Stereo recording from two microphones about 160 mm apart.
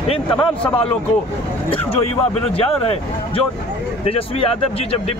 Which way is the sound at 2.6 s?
35° left (ahead or behind).